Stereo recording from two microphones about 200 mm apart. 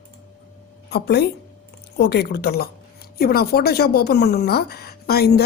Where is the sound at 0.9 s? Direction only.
55° left (ahead or behind).